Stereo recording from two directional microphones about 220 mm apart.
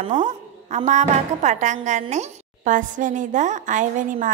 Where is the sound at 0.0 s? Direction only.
25° right (ahead or behind).